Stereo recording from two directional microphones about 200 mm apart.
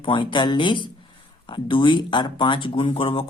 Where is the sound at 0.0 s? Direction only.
25° left (ahead or behind).